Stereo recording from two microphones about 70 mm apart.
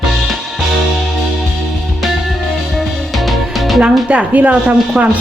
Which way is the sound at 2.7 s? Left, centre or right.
Centre.